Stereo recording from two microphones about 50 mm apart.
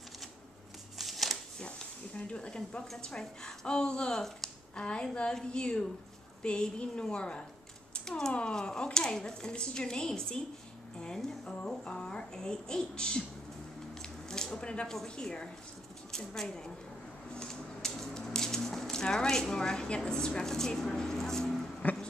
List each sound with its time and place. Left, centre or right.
0.9 s shuffling cards: centre
2.1 s a woman's voice: left
4.7 s a woman's voice: left
14.0 s a sound: centre
15.1 s speech: centre
17.3 s a sound: centre
19.5 s speech: centre